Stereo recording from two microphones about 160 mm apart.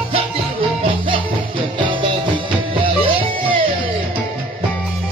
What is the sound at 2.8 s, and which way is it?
Music, 35° right (ahead or behind).